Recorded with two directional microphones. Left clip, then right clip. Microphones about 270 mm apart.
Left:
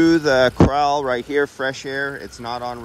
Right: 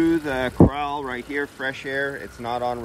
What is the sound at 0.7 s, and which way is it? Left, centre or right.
Speech, left.